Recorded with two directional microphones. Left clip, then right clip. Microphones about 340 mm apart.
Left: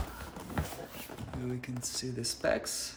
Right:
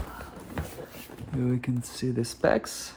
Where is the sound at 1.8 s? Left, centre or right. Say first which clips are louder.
Right 2 dB; centre.